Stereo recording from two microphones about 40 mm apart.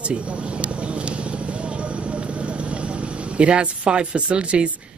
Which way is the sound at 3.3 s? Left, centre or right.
Right.